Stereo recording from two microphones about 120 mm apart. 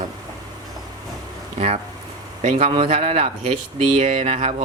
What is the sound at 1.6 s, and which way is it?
Speech, 65° right (ahead or behind).